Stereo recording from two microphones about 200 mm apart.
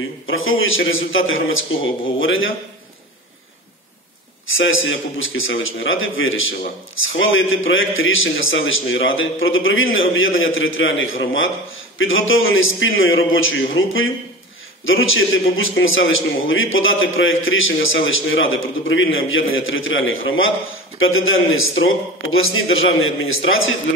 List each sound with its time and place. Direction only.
0.3 s a man's voice: 85° left
4.6 s a man's voice: 75° left (ahead or behind)